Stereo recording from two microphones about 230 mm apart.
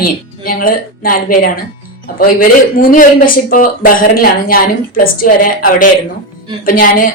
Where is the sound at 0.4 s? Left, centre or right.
Left.